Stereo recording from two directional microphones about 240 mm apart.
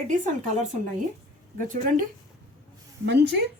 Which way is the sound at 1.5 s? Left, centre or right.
Right.